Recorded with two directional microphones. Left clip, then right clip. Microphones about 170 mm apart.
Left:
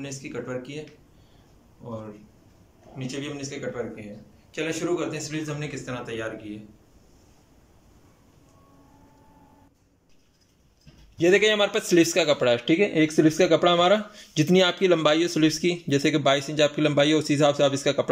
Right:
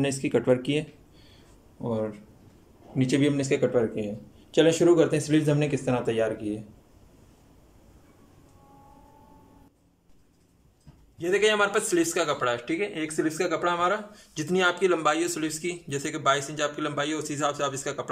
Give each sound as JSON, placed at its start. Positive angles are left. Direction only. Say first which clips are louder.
{"t": 0.0, "sound": "speech", "louder": "right 9 dB", "side_deg": -50}
{"t": 3.0, "sound": "speech", "louder": "right 9 dB", "side_deg": -60}
{"t": 4.6, "sound": "speech", "louder": "right 8 dB", "side_deg": -40}
{"t": 11.1, "sound": "a man's voice", "louder": "left 3 dB", "side_deg": 25}